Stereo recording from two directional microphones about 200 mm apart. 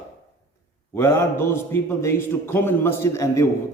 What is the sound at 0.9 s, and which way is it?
A man's voice, 15° left (ahead or behind).